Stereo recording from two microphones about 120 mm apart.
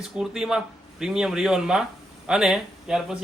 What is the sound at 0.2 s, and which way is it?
Speech, 5° right (ahead or behind).